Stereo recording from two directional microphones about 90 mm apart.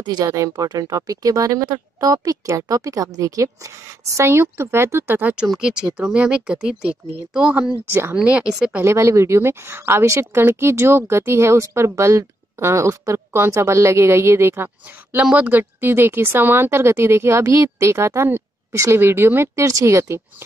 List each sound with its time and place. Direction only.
0.0 s speech: 50° right (ahead or behind)
2.1 s a woman's voice: 35° right (ahead or behind)
5.5 s speech: 10° right (ahead or behind)
7.8 s speech: 20° right (ahead or behind); by 8.7 s 5° right (ahead or behind)
8.7 s a woman's voice: 30° right (ahead or behind)